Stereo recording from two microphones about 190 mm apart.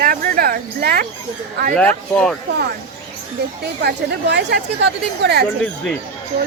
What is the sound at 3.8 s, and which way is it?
Speech, 65° right (ahead or behind).